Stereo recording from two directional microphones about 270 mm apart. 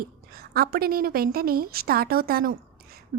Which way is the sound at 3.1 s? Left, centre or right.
Right.